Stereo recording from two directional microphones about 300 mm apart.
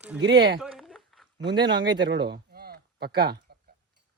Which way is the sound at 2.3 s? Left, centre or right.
Right.